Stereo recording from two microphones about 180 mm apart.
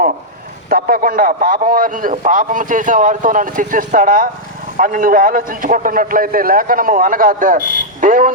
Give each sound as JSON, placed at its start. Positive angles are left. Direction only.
{"t": 0.7, "sound": "a man's voice", "side_deg": -50}